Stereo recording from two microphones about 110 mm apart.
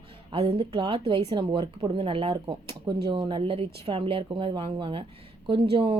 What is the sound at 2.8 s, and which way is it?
Speech, 40° right (ahead or behind).